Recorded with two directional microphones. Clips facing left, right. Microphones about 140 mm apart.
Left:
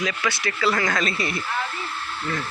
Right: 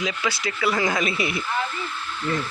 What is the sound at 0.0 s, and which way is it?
Speech, 10° right (ahead or behind).